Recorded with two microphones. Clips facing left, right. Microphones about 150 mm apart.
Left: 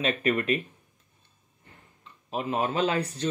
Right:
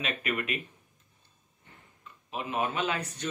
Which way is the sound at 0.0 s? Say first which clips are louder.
Left 7 dB; 35° left (ahead or behind).